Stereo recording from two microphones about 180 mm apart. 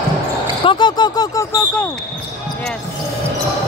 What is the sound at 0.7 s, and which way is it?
Speech, 25° left (ahead or behind).